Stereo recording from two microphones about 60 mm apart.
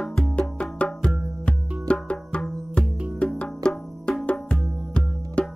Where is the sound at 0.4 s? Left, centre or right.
Centre.